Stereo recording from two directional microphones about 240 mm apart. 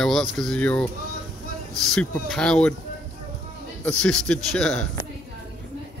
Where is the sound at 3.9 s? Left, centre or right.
Centre.